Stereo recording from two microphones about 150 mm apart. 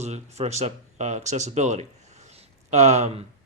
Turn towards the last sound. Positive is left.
turn(degrees=-50)  # may be behind; listen again after turning